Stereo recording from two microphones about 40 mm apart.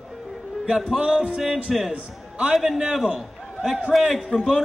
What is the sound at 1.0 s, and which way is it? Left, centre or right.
Music, right.